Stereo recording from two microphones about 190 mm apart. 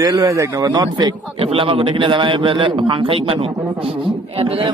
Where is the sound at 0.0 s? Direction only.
20° right (ahead or behind).